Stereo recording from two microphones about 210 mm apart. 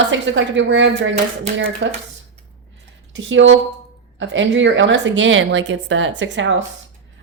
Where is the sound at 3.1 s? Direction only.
60° right (ahead or behind).